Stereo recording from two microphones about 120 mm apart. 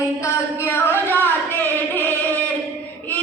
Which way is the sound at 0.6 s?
20° left (ahead or behind).